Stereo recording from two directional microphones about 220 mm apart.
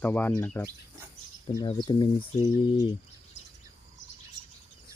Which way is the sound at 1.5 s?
20° left (ahead or behind).